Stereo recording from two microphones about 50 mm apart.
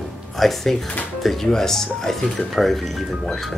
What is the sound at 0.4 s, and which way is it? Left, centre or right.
Speech, centre.